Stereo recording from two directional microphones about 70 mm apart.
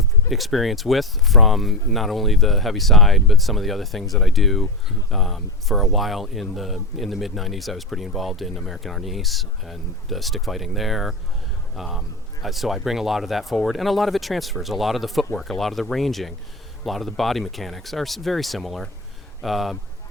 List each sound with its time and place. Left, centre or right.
0.3 s speech: centre